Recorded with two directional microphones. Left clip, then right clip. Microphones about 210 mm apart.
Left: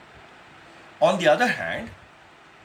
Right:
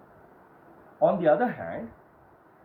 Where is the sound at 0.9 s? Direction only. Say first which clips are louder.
Left 3 dB; 15° left (ahead or behind).